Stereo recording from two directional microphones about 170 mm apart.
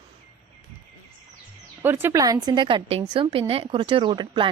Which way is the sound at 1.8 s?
15° right (ahead or behind).